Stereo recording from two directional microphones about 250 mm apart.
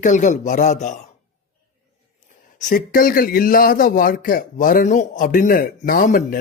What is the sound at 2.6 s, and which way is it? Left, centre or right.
Speech, left.